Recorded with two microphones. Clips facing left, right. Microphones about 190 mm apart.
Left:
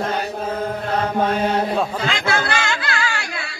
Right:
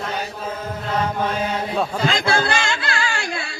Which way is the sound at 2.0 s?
30° right (ahead or behind).